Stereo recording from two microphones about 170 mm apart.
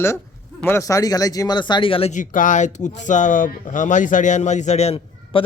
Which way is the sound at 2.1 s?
50° left (ahead or behind).